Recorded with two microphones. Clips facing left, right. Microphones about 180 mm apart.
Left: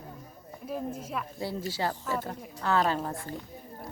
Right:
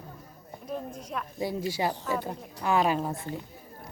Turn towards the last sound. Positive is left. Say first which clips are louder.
# right 2 dB
turn(degrees=-10)  # may be behind; listen again after turning